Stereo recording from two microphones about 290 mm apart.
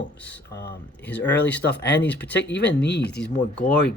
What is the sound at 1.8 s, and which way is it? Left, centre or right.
Speech, left.